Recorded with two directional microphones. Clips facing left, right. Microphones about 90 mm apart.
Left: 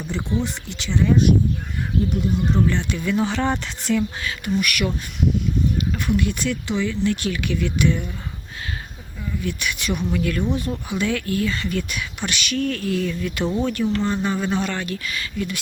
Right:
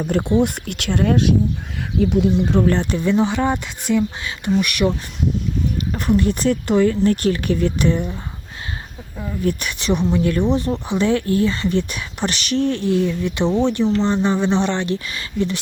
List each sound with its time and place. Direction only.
0.1 s speech: 60° right (ahead or behind); by 1.3 s 75° right (ahead or behind)
2.0 s speech: 90° right
2.6 s speech: 35° right (ahead or behind)
3.2 s speech: 15° right (ahead or behind); by 15.6 s 30° right (ahead or behind)